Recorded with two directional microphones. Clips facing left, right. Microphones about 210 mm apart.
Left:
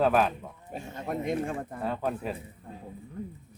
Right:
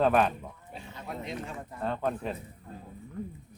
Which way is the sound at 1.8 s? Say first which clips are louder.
Right 2 dB; 5° left (ahead or behind).